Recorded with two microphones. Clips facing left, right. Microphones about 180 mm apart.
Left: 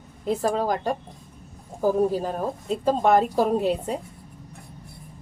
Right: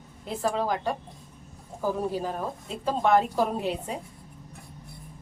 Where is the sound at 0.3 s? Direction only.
40° left (ahead or behind).